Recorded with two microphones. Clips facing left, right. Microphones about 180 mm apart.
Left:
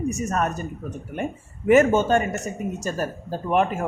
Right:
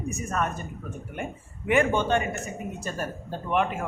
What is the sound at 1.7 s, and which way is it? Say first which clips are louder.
Speech: left 6 dB; 40° left (ahead or behind).